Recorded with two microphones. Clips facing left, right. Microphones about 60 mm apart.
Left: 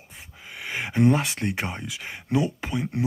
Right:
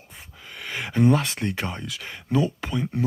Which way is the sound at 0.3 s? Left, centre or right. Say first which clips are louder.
Left 1 dB; centre.